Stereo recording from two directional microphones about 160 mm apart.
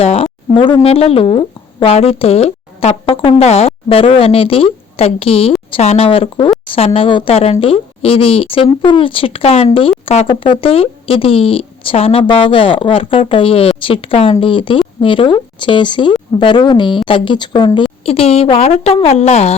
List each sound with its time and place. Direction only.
0.0 s speech: 35° left (ahead or behind)